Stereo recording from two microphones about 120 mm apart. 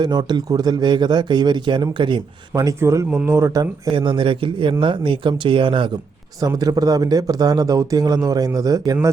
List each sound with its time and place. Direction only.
0.0 s speech: 35° right (ahead or behind)
2.6 s speech: 25° right (ahead or behind); by 5.9 s 45° right (ahead or behind)
6.4 s speech: 30° right (ahead or behind)